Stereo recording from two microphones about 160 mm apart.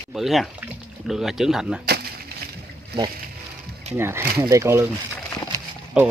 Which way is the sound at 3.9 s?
15° right (ahead or behind).